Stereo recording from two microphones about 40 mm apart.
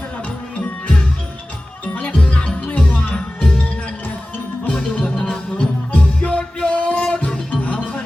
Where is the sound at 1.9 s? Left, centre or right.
Left.